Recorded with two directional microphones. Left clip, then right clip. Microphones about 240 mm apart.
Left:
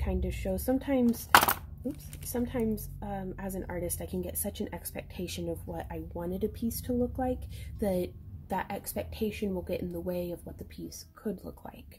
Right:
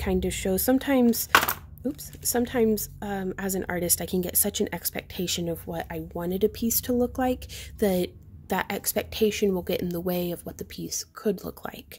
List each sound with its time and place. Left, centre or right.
0.0 s a woman's voice: right
2.3 s a woman's voice: right